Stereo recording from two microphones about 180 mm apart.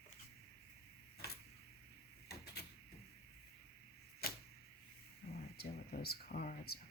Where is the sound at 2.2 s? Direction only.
60° left (ahead or behind).